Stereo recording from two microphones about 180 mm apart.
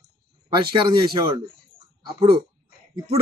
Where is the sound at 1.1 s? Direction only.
15° right (ahead or behind).